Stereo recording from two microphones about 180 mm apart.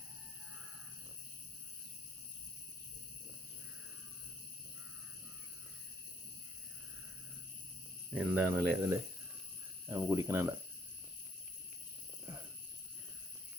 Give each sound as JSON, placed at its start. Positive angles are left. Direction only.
{"t": 8.1, "sound": "speech", "side_deg": -10}